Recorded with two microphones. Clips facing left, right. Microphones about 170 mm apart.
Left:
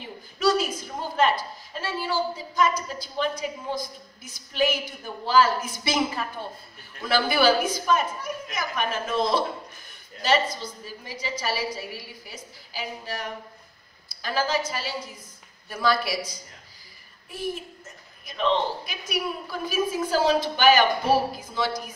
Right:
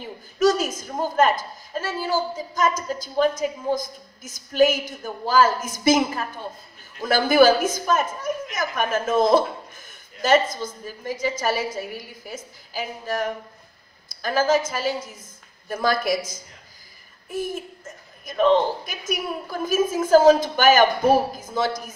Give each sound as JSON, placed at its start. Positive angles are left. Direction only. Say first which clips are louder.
{"t": 0.4, "sound": "a woman's voice", "louder": "right 3 dB", "side_deg": -45}